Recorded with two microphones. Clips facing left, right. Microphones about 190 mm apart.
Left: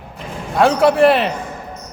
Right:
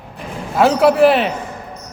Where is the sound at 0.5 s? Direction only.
Centre (ahead or behind).